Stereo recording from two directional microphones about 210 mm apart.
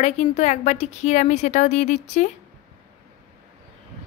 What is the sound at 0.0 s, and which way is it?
A woman's voice, 30° left (ahead or behind).